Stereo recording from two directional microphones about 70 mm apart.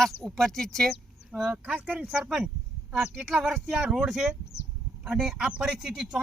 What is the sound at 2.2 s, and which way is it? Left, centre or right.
Speech, centre.